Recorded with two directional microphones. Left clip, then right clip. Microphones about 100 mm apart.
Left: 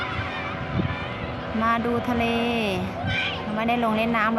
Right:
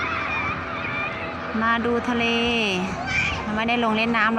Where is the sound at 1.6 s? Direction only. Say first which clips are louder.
Right 1 dB; 10° right (ahead or behind).